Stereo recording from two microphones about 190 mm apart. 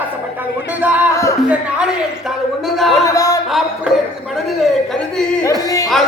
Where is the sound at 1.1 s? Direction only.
15° left (ahead or behind).